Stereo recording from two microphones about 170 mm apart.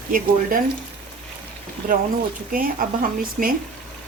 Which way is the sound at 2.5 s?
55° right (ahead or behind).